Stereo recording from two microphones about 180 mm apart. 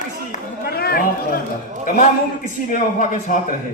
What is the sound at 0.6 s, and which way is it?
Speech, 60° left (ahead or behind).